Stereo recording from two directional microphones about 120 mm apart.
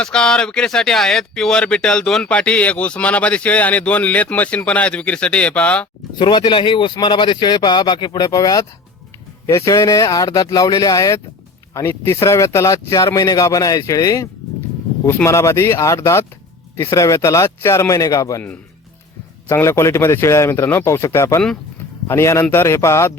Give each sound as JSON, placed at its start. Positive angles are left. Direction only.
{"t": 0.0, "sound": "speech", "side_deg": 5}
{"t": 6.1, "sound": "speech", "side_deg": 40}
{"t": 19.5, "sound": "speech", "side_deg": 20}